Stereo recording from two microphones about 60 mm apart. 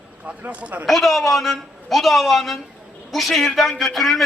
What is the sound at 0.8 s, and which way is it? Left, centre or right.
A man's voice, centre.